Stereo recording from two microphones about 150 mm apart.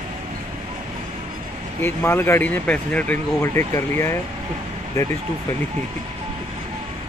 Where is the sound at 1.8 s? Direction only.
15° left (ahead or behind).